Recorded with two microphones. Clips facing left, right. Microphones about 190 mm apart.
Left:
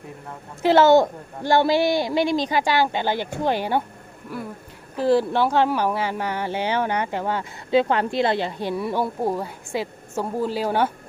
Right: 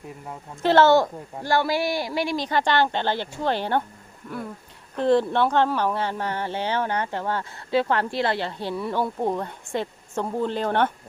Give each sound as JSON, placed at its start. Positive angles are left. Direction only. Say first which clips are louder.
{"t": 0.6, "sound": "speech", "louder": "left 2 dB", "side_deg": 10}
{"t": 4.9, "sound": "speech", "louder": "left 1 dB", "side_deg": 5}